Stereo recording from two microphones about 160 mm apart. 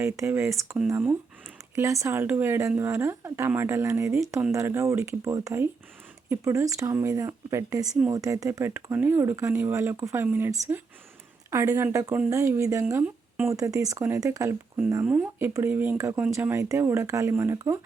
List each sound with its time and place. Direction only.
0.0 s speech: 15° right (ahead or behind)